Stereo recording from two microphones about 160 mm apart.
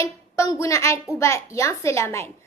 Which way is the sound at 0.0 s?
20° left (ahead or behind).